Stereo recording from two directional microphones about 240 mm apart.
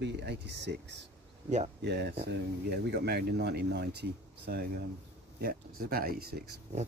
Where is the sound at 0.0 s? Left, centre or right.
Right.